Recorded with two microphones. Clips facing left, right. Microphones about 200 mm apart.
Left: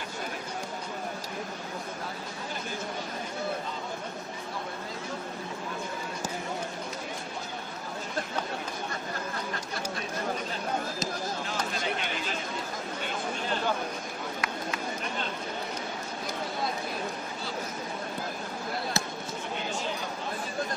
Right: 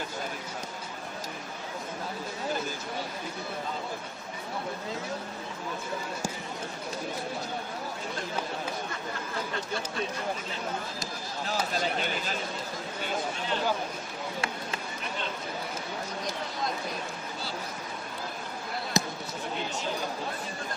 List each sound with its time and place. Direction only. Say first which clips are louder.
18.9 s basketball bounce: right 4 dB; 15° right (ahead or behind)